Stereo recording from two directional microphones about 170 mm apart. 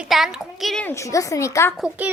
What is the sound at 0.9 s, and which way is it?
Speech, 15° left (ahead or behind).